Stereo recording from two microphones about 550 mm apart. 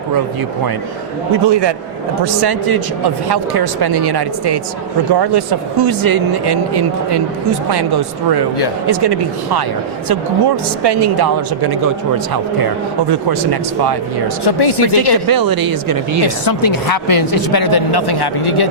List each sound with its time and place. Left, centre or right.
1.3 s speech: right
13.1 s speech: right
14.4 s speech: left
15.3 s speech: right
16.2 s a woman's voice: left